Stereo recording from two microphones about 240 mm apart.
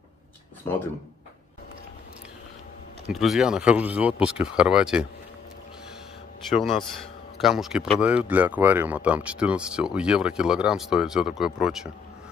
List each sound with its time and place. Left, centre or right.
3.1 s speech: centre
6.5 s speech: centre